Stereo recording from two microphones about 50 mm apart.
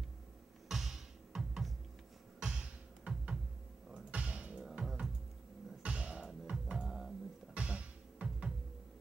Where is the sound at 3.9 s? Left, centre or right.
Right.